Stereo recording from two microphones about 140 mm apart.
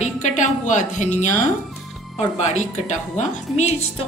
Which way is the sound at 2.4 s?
55° left (ahead or behind).